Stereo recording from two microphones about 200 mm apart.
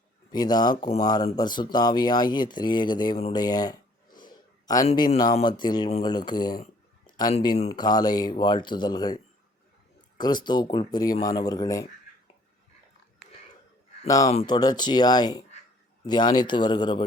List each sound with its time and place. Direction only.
0.3 s speech: 20° left (ahead or behind)
3.3 s a sound: 20° left (ahead or behind)
4.9 s speech: 20° left (ahead or behind)
7.7 s speech: 20° left (ahead or behind)
14.3 s speech: 25° left (ahead or behind)